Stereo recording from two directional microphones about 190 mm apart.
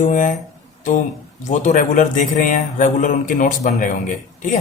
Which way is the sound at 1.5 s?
40° left (ahead or behind).